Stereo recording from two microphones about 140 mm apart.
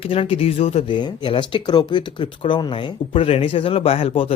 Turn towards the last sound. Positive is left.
turn(degrees=45)  # may be behind; listen again after turning